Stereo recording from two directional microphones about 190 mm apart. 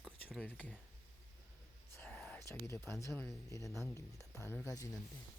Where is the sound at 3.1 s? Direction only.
Centre (ahead or behind).